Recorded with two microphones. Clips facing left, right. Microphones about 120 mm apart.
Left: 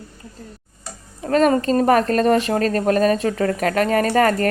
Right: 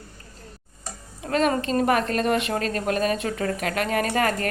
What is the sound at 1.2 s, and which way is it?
A woman's voice, 40° left (ahead or behind).